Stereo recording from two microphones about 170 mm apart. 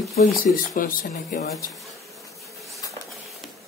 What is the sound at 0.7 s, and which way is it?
Speech, 50° left (ahead or behind).